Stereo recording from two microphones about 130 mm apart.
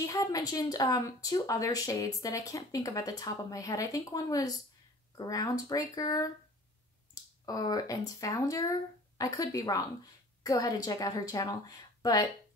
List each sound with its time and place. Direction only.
0.0 s speech: 25° left (ahead or behind)
7.4 s speech: 30° left (ahead or behind)